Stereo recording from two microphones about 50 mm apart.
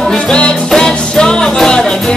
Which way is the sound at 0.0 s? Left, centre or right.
Centre.